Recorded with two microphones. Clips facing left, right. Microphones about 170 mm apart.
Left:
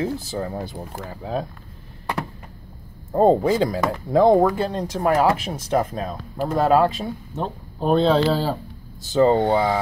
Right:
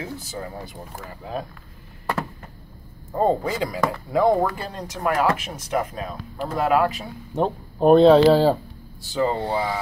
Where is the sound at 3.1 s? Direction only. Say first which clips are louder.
Left 5 dB; 25° left (ahead or behind).